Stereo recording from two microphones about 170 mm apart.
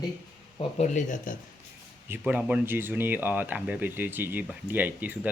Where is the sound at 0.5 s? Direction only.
45° left (ahead or behind).